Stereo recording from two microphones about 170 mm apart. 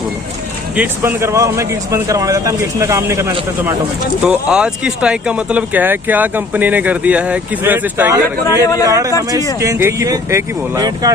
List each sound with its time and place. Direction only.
1.0 s speech: 15° right (ahead or behind)
4.2 s speech: 5° right (ahead or behind); by 11.1 s 20° right (ahead or behind)